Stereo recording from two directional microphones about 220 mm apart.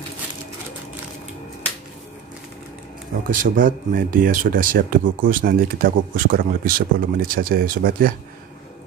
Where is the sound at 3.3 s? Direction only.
40° right (ahead or behind).